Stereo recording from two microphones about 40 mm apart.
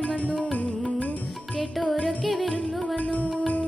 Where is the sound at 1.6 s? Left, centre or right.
Centre.